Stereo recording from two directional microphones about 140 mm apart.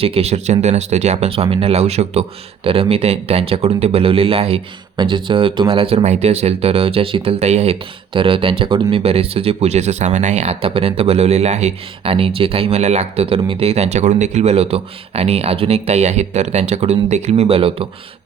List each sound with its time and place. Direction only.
0.0 s speech: 45° right (ahead or behind)
1.3 s speech: 40° right (ahead or behind)